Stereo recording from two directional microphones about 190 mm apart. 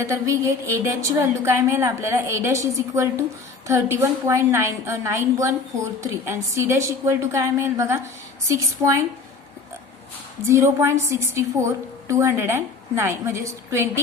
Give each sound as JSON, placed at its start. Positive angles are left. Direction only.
{"t": 0.0, "sound": "a woman's voice", "side_deg": -15}
{"t": 10.4, "sound": "a woman's voice", "side_deg": -15}